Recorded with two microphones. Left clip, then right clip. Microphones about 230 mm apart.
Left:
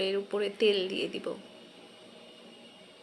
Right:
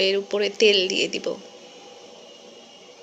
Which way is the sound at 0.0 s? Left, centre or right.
Centre.